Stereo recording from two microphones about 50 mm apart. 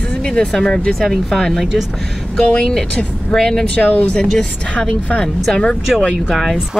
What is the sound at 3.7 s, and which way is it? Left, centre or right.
Speech, left.